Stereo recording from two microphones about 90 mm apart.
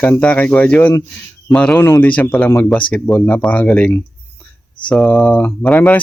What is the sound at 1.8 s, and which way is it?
Speech, 20° left (ahead or behind).